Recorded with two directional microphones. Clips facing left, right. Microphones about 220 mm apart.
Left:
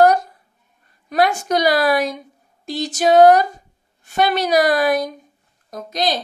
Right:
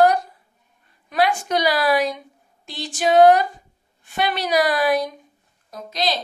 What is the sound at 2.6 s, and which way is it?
A woman's voice, 40° left (ahead or behind).